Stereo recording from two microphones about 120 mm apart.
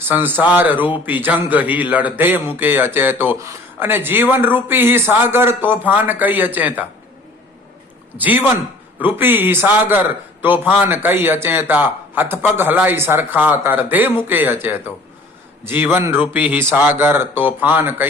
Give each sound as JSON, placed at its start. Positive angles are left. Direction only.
{"t": 0.0, "sound": "speech", "side_deg": -15}
{"t": 8.2, "sound": "speech", "side_deg": -15}